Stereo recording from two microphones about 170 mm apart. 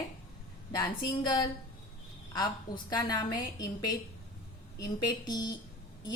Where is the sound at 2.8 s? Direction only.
25° left (ahead or behind).